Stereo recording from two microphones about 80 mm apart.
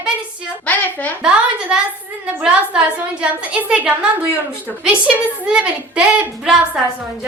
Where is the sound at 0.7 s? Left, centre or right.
Centre.